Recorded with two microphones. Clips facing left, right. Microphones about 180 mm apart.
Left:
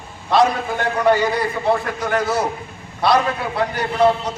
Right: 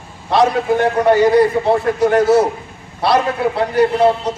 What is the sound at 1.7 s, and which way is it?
A man's voice, 25° right (ahead or behind).